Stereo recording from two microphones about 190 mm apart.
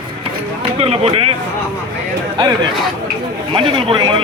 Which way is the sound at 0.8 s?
30° right (ahead or behind).